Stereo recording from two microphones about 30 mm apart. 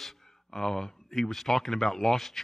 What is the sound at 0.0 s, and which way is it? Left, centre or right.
A man's voice, centre.